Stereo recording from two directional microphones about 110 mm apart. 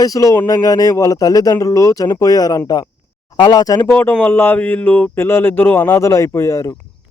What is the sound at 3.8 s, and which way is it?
Speech, 20° left (ahead or behind).